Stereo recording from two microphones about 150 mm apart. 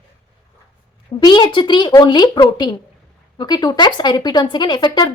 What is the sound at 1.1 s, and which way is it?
A woman's voice, 30° left (ahead or behind).